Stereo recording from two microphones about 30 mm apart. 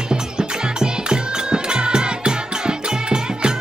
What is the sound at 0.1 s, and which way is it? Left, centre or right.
Music, right.